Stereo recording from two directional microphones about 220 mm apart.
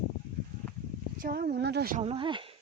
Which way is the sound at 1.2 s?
45° right (ahead or behind).